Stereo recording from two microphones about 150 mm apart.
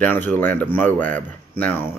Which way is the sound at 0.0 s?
15° left (ahead or behind).